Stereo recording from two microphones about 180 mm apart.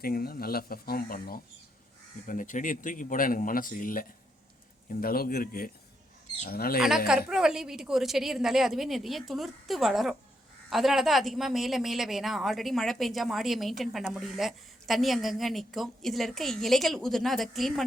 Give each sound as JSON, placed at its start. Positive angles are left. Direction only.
{"t": 0.0, "sound": "speech", "side_deg": 55}
{"t": 6.7, "sound": "a woman's voice", "side_deg": -5}